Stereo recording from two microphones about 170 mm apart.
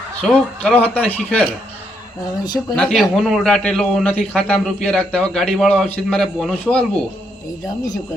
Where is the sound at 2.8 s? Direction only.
Centre (ahead or behind).